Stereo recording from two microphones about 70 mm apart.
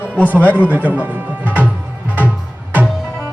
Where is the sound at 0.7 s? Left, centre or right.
Right.